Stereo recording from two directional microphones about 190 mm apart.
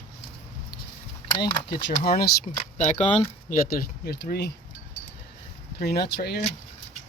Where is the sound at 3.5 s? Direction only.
55° left (ahead or behind).